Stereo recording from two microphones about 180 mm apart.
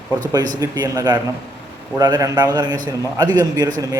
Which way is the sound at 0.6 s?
20° right (ahead or behind).